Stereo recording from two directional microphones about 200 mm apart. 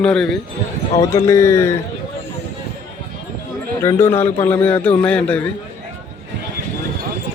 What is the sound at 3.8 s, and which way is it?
Speech, 10° left (ahead or behind).